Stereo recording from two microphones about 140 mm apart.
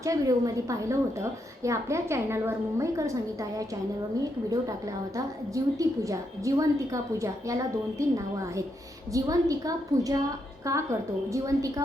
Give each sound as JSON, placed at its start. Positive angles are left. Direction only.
{"t": 0.0, "sound": "a woman's voice", "side_deg": -25}
{"t": 5.1, "sound": "a woman's voice", "side_deg": -25}